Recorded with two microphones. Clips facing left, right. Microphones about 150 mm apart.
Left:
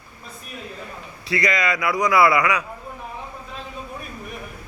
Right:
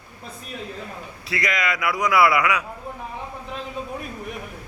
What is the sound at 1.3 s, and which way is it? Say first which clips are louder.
A man's voice: left 3 dB; centre (ahead or behind).